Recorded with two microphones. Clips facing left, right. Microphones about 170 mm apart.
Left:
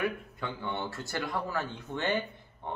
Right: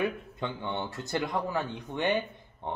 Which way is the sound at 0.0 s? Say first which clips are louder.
Right 2 dB; 20° right (ahead or behind).